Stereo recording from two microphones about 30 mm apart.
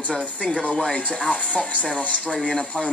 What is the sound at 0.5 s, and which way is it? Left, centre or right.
A man's voice, left.